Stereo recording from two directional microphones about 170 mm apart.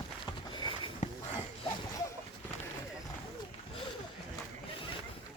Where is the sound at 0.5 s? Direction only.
25° left (ahead or behind).